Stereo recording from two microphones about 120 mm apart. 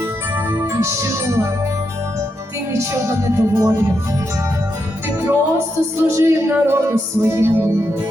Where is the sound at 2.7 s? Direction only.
25° right (ahead or behind).